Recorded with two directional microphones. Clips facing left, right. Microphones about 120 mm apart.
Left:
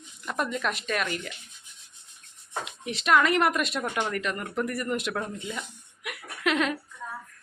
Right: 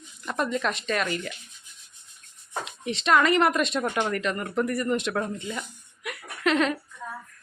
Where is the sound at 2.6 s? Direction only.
5° left (ahead or behind).